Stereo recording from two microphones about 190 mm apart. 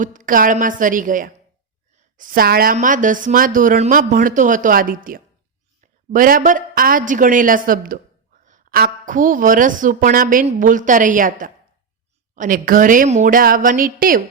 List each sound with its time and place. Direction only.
0.0 s a woman's voice: 45° right (ahead or behind)